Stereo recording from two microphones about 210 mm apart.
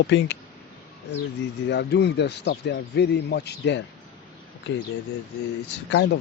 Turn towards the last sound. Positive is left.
turn(degrees=55)  # may be behind; listen again after turning